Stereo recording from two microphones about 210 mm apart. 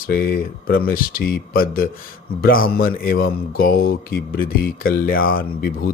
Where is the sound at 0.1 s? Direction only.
45° left (ahead or behind).